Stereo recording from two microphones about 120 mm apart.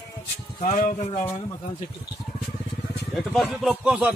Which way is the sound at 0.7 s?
90° left.